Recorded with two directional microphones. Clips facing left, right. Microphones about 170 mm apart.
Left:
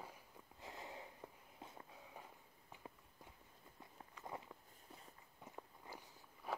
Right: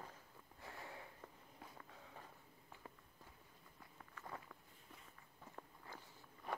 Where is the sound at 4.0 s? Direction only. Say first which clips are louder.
Left 2 dB; 20° left (ahead or behind).